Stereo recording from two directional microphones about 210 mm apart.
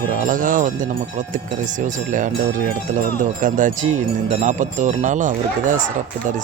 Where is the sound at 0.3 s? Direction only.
40° right (ahead or behind).